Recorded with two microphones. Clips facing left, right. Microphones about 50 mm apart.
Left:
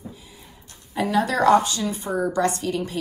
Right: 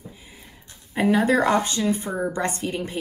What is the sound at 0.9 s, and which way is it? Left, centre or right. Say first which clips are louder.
Speech: right 3 dB; right.